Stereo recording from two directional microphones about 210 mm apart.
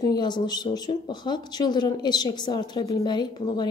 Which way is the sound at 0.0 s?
20° left (ahead or behind).